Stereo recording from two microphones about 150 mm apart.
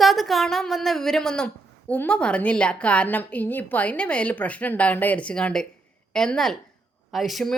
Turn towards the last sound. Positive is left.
turn(degrees=0)  # may be behind; listen again after turning